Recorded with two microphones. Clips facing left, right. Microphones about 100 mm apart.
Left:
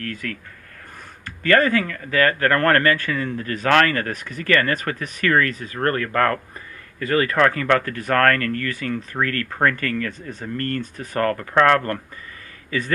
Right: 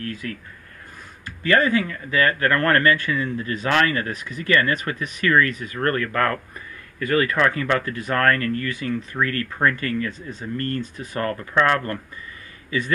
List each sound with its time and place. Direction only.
0.1 s speech: 55° left (ahead or behind)
1.4 s speech: 50° left (ahead or behind); by 7.3 s 35° left (ahead or behind)
7.3 s speech: 50° left (ahead or behind)